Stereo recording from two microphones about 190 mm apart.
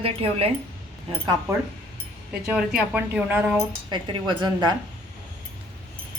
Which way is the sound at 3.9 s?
25° right (ahead or behind).